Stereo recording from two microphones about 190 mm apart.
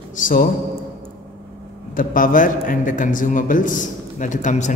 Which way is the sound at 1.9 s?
45° left (ahead or behind).